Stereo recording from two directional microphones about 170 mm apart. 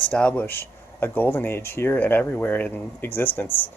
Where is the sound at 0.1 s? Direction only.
5° left (ahead or behind).